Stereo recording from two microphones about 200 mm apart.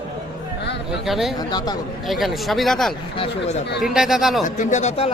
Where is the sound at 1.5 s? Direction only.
20° left (ahead or behind).